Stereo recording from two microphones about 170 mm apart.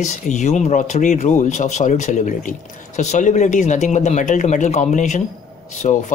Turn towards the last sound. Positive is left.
turn(degrees=45)  # may be behind; listen again after turning